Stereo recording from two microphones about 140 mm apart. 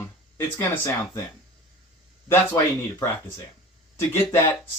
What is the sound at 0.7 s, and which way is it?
Speech, 20° left (ahead or behind).